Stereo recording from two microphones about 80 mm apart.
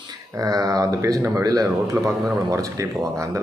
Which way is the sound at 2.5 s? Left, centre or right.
Right.